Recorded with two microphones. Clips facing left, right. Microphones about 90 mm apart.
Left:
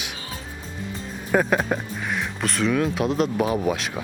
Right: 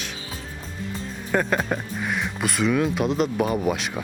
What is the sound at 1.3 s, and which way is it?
Speech, 5° left (ahead or behind).